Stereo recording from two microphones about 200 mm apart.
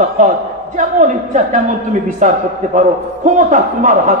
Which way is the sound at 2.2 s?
40° right (ahead or behind).